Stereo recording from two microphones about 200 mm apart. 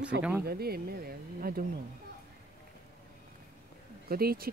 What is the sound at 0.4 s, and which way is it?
Speech, 50° right (ahead or behind).